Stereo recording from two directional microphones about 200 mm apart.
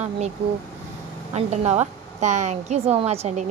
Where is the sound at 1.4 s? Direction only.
35° right (ahead or behind).